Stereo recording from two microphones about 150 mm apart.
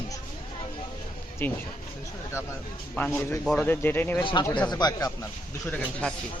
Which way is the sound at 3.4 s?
Centre (ahead or behind).